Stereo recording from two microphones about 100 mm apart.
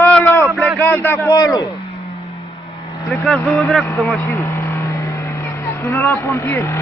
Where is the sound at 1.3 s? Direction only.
35° left (ahead or behind).